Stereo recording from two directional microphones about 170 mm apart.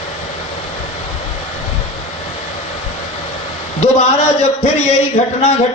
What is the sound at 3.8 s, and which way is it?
A man's voice, 40° left (ahead or behind).